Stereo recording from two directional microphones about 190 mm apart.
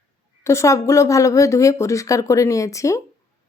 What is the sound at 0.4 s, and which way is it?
Speech, 15° left (ahead or behind).